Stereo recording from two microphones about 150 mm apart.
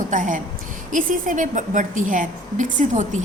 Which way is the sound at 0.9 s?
60° right (ahead or behind).